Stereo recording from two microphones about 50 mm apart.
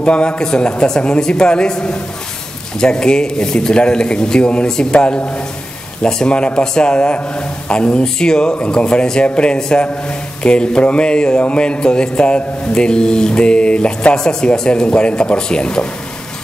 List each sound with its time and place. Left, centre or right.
0.0 s a man's voice: left